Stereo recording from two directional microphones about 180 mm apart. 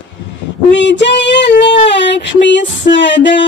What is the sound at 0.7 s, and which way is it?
Music, 85° left.